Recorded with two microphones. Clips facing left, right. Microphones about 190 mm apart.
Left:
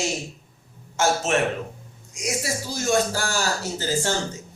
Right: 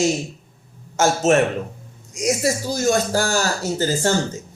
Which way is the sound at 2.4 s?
40° right (ahead or behind).